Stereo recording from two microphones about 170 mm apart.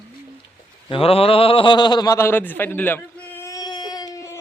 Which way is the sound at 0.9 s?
35° left (ahead or behind).